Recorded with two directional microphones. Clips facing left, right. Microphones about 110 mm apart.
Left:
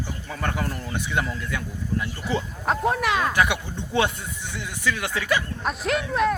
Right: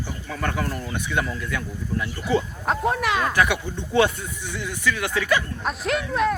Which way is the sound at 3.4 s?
25° left (ahead or behind).